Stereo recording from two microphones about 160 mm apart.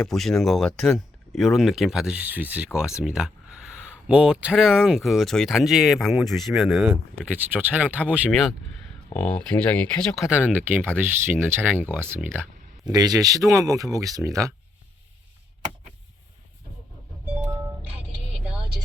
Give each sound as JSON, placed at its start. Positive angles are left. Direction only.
{"t": 0.0, "sound": "speech", "side_deg": 0}
{"t": 7.5, "sound": "speech", "side_deg": -10}
{"t": 12.9, "sound": "speech", "side_deg": -25}
{"t": 17.4, "sound": "music", "side_deg": -10}